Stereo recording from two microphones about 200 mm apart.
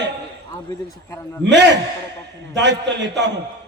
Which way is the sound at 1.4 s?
60° right (ahead or behind).